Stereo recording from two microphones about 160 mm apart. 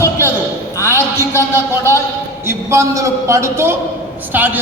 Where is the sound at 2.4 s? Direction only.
15° right (ahead or behind).